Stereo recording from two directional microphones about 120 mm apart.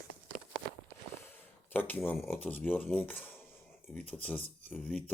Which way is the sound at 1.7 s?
15° left (ahead or behind).